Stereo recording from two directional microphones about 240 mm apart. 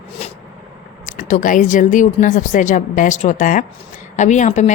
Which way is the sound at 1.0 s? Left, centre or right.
Left.